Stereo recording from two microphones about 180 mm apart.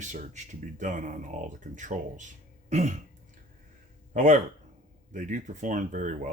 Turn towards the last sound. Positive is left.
turn(degrees=-45)  # may be behind; listen again after turning